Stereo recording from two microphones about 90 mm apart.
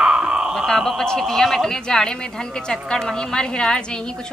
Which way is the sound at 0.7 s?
5° left (ahead or behind).